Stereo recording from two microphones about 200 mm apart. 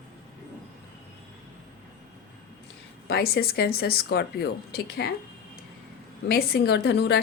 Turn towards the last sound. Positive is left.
turn(degrees=55)  # may be behind; listen again after turning